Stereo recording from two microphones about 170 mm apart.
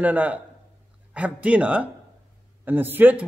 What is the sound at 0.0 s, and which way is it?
A man's voice, 10° right (ahead or behind).